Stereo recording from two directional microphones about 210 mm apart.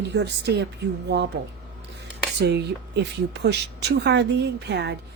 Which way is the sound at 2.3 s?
50° right (ahead or behind).